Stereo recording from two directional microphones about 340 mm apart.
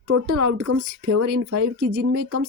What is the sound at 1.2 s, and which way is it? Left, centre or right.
Speech, right.